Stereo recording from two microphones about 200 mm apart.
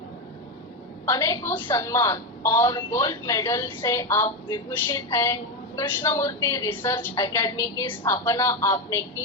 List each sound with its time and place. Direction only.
1.0 s a woman's voice: 15° left (ahead or behind)